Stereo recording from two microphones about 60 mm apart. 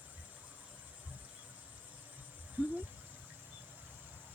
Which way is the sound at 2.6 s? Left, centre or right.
Right.